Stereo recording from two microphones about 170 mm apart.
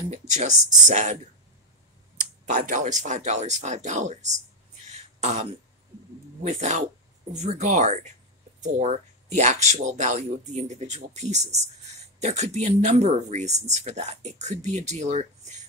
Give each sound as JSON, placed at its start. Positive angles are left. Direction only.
{"t": 0.1, "sound": "speech", "side_deg": -45}
{"t": 2.4, "sound": "speech", "side_deg": -45}
{"t": 4.9, "sound": "a sound", "side_deg": -40}
{"t": 6.4, "sound": "speech", "side_deg": -45}